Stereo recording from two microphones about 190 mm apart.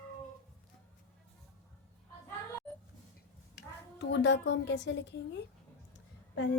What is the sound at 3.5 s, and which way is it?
A woman's voice, 65° left (ahead or behind).